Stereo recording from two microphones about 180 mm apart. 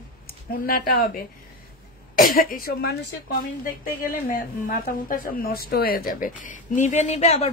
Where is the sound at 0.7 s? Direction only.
55° left (ahead or behind).